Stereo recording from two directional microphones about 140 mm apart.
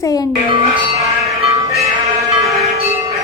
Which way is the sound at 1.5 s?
20° right (ahead or behind).